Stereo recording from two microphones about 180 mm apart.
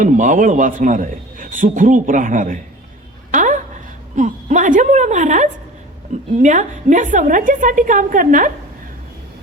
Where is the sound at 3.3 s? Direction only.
45° right (ahead or behind).